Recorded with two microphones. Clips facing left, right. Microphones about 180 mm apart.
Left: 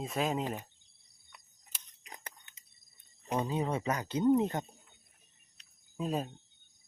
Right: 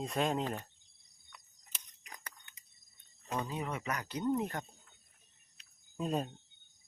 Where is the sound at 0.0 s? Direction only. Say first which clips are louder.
Even; 5° left (ahead or behind).